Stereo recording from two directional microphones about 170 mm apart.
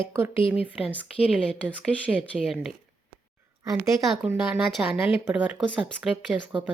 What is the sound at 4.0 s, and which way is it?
Speech, 5° right (ahead or behind).